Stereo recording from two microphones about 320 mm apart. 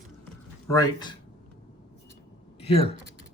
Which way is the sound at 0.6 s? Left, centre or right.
Centre.